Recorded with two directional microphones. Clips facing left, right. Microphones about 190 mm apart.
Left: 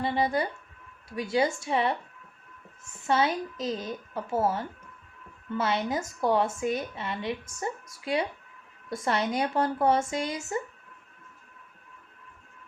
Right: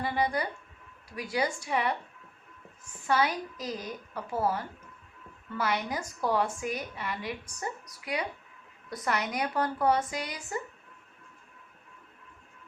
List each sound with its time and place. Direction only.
0.0 s a woman's voice: 25° left (ahead or behind)